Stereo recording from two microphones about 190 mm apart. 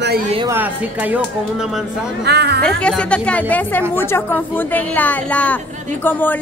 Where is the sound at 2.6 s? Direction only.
5° left (ahead or behind).